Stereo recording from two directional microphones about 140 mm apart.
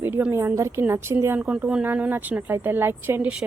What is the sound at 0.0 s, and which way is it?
Speech, 15° right (ahead or behind).